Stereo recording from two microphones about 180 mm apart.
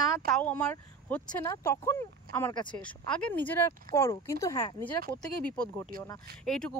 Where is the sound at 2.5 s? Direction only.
25° left (ahead or behind).